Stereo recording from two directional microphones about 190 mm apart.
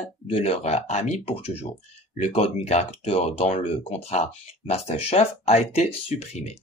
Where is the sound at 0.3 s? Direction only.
35° left (ahead or behind).